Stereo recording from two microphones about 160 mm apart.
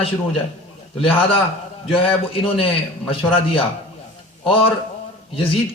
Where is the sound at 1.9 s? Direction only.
35° left (ahead or behind).